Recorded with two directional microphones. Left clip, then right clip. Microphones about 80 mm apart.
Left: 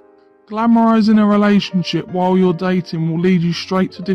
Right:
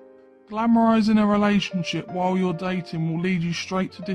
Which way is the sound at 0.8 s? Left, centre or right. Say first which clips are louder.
Left 6 dB; left.